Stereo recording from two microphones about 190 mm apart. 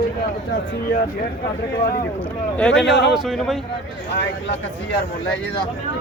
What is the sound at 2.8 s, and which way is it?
Speech, 65° left (ahead or behind).